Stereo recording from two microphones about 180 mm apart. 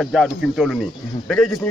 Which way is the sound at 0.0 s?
Centre (ahead or behind).